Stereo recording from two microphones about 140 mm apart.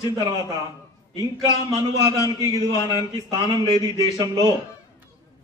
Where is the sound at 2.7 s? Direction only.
25° left (ahead or behind).